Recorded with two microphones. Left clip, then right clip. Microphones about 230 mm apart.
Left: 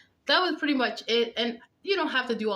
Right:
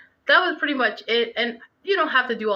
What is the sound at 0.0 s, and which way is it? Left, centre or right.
A woman's voice, centre.